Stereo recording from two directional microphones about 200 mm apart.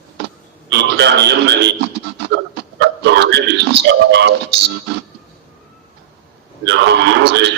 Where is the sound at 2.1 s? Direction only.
60° right (ahead or behind).